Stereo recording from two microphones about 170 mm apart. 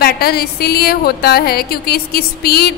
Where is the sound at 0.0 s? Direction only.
65° left (ahead or behind).